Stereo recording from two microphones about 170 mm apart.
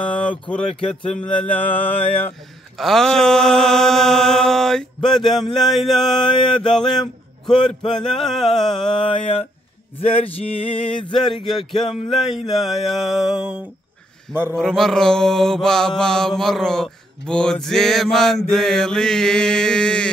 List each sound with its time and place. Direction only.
0.0 s speech: 10° left (ahead or behind)
1.1 s mantra: 5° left (ahead or behind)
6.2 s mantra: 30° left (ahead or behind)
7.9 s mantra: centre (ahead or behind)
8.9 s a sound: 30° left (ahead or behind)
11.4 s mantra: centre (ahead or behind)
14.3 s a sound: 15° right (ahead or behind)
14.6 s mantra: centre (ahead or behind)